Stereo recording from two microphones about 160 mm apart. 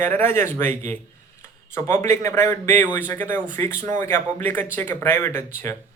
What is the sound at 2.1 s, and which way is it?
A man's voice, 15° left (ahead or behind).